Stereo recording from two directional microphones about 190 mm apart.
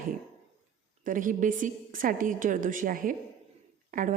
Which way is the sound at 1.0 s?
45° right (ahead or behind).